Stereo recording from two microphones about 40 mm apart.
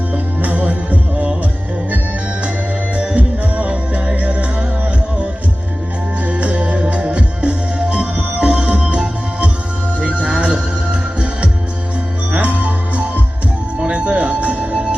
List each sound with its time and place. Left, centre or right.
0.1 s music: right
2.9 s music: right
6.2 s music: right
12.3 s music: right
13.8 s music: right